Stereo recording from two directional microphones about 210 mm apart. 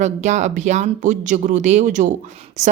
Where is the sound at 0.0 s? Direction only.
35° right (ahead or behind).